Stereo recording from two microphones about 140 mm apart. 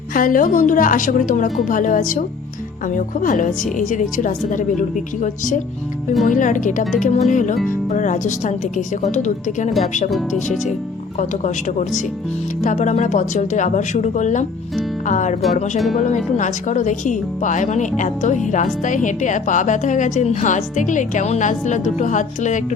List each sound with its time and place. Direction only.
0.1 s speech: 80° left; by 9.7 s 60° left (ahead or behind)
10.1 s speech: centre (ahead or behind)
11.2 s speech: 60° left (ahead or behind)